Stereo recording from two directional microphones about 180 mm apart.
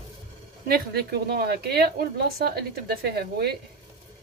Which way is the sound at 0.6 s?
60° right (ahead or behind).